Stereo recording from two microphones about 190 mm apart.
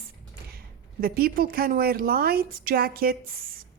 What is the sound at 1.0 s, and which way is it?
A woman's voice, 50° right (ahead or behind).